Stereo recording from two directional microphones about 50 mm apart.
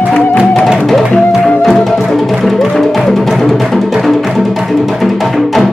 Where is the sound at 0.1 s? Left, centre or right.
Left.